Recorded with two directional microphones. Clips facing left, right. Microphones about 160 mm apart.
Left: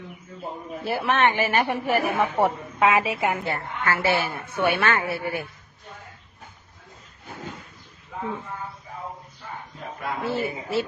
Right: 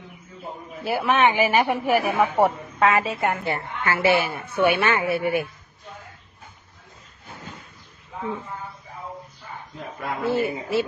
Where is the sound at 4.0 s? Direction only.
15° right (ahead or behind).